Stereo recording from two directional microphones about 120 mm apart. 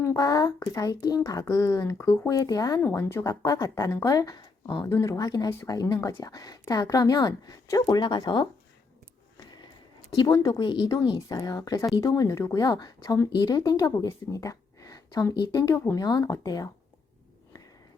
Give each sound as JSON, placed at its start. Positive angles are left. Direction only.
{"t": 0.0, "sound": "a sound", "side_deg": 20}
{"t": 0.3, "sound": "a woman's voice", "side_deg": 30}
{"t": 3.0, "sound": "speech", "side_deg": 20}
{"t": 4.9, "sound": "a woman's voice", "side_deg": 25}
{"t": 10.1, "sound": "speech", "side_deg": 30}
{"t": 10.6, "sound": "a woman's voice", "side_deg": 40}
{"t": 14.0, "sound": "a sound", "side_deg": 30}
{"t": 15.5, "sound": "a woman's voice", "side_deg": 25}